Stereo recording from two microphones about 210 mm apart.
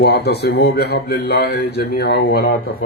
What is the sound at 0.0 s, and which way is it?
Speech, 50° left (ahead or behind).